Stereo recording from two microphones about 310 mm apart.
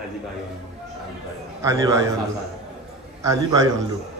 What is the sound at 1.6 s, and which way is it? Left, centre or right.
Speech, centre.